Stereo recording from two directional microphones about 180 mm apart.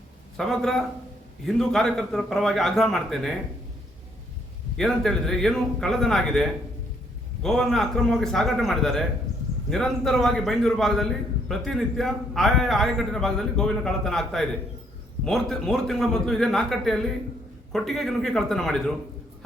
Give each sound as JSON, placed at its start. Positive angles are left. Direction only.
{"t": 0.3, "sound": "a man's voice", "side_deg": 0}
{"t": 4.8, "sound": "a man's voice", "side_deg": 0}